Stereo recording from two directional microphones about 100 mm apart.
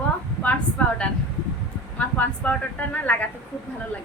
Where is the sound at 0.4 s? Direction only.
15° left (ahead or behind).